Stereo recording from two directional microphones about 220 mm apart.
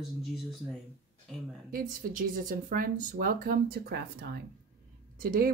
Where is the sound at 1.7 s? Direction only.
40° right (ahead or behind).